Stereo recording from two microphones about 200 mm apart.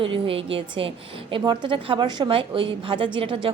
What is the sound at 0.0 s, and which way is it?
A woman's voice, 25° right (ahead or behind).